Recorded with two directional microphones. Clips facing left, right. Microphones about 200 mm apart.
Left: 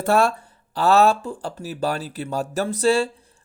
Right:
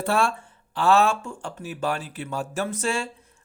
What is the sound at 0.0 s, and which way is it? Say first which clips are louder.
Speech: left 5 dB; 40° left (ahead or behind).